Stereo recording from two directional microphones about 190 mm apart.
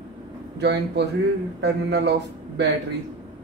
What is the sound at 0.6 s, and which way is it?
A man's voice, 60° right (ahead or behind).